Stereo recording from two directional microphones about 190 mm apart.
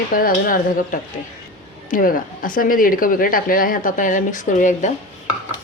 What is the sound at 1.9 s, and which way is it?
Speech, 45° left (ahead or behind).